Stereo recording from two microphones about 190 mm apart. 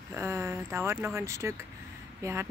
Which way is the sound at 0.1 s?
15° right (ahead or behind).